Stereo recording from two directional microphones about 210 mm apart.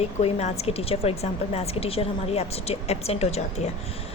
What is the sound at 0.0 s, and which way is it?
Speech, 30° left (ahead or behind).